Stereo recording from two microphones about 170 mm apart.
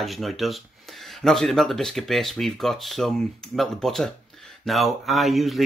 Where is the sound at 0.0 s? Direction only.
Centre (ahead or behind).